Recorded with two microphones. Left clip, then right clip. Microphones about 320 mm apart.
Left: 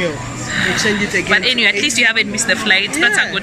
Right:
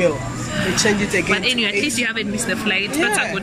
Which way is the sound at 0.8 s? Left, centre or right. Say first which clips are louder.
Left 2 dB; right.